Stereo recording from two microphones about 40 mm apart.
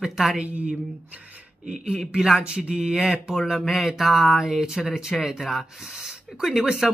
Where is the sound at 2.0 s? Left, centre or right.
Centre.